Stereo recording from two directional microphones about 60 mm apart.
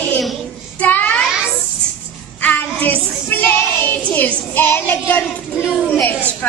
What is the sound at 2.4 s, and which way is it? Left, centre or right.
Child singing, left.